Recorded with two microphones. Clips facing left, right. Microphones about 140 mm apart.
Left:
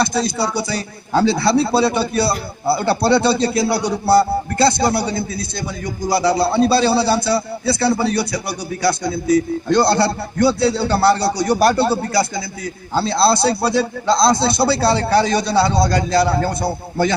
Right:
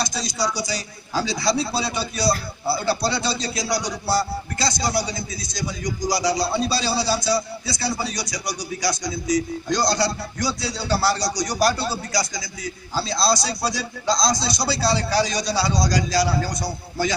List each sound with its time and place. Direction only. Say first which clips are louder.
0.0 s a man's voice: left 7 dB; 60° left (ahead or behind)